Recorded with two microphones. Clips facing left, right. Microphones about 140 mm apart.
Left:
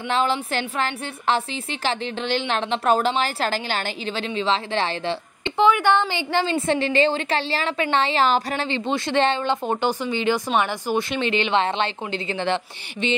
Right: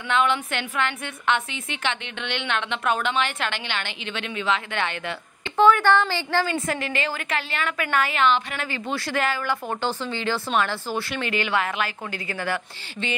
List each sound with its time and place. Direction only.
0.1 s a woman's voice: 35° left (ahead or behind)
5.6 s a woman's voice: 15° left (ahead or behind)